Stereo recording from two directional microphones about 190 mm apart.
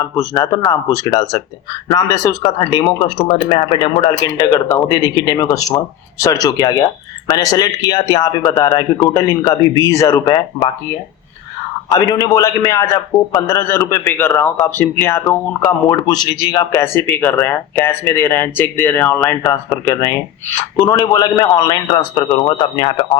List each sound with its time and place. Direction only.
0.0 s a man's voice: 15° left (ahead or behind)
11.9 s a man's voice: 20° left (ahead or behind)